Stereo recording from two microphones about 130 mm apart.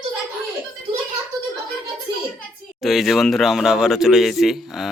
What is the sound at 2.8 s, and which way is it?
Speech, centre (ahead or behind).